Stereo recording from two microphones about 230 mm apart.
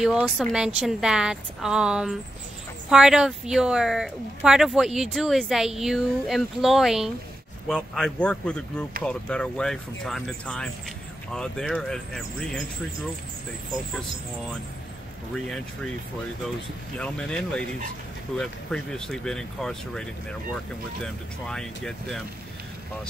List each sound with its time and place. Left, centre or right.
0.0 s speech: centre
15.3 s speech: centre
17.0 s speech: centre